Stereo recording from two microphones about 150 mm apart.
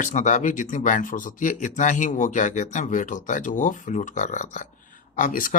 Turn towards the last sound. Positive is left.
turn(degrees=65)  # may be behind; listen again after turning